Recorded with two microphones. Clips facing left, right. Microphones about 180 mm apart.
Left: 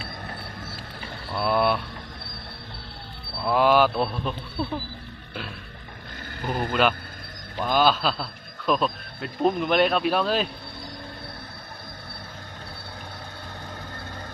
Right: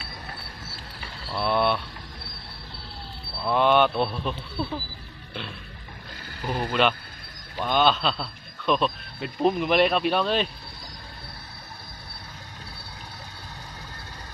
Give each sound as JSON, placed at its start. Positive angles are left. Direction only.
{"t": 0.0, "sound": "train", "side_deg": 50}
{"t": 1.4, "sound": "speech", "side_deg": 0}
{"t": 3.4, "sound": "a man's voice", "side_deg": 5}
{"t": 6.4, "sound": "speech", "side_deg": 50}
{"t": 7.6, "sound": "a man's voice", "side_deg": 5}